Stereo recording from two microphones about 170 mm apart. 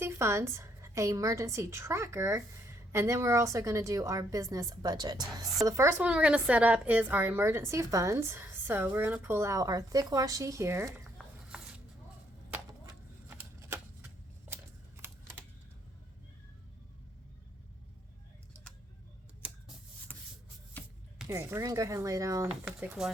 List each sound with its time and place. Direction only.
0.0 s a woman's voice: 15° right (ahead or behind)
11.4 s a sound: 5° right (ahead or behind)
13.2 s shuffling cards: 10° right (ahead or behind)
20.1 s rub: 10° left (ahead or behind)
20.8 s music: 10° left (ahead or behind)
21.2 s speech: 15° right (ahead or behind)
22.6 s speech: 5° right (ahead or behind)